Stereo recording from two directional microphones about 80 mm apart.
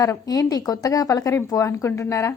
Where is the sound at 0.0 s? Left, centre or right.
Left.